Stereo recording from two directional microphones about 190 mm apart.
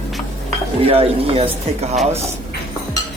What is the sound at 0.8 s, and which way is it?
A woman's voice, 30° right (ahead or behind).